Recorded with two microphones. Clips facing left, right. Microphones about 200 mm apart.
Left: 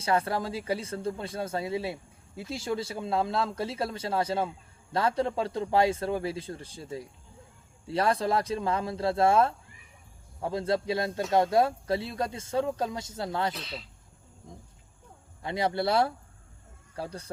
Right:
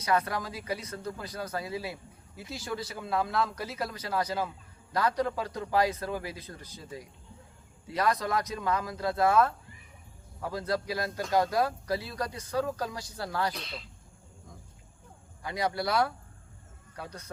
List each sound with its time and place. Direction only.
0.0 s speech: 30° left (ahead or behind)
13.5 s speech: centre (ahead or behind)
15.4 s speech: 25° left (ahead or behind)